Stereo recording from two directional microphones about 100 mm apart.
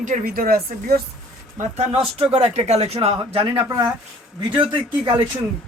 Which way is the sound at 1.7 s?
65° right (ahead or behind).